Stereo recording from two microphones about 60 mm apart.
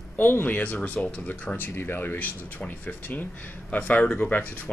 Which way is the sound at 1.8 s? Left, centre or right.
Left.